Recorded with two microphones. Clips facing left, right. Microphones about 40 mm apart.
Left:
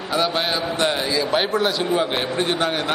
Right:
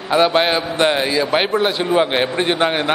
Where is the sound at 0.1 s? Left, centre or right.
Right.